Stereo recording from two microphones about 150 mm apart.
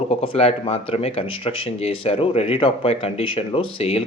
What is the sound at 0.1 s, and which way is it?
Speech, 40° left (ahead or behind).